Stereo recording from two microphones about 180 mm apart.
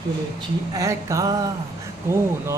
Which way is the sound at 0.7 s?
15° right (ahead or behind).